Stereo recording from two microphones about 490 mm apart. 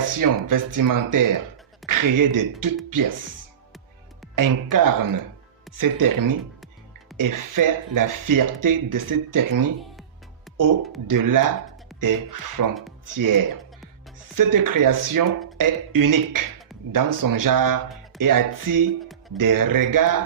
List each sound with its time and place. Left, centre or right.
0.1 s speech: right
4.4 s speech: right
11.1 s speech: right